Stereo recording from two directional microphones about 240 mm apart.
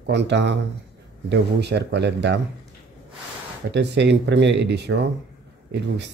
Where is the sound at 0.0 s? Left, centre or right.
Right.